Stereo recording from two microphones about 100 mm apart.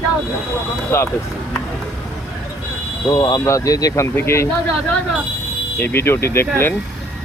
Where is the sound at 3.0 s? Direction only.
40° left (ahead or behind); by 4.5 s 25° left (ahead or behind).